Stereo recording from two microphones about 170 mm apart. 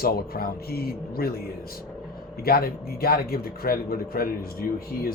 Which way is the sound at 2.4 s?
60° left (ahead or behind).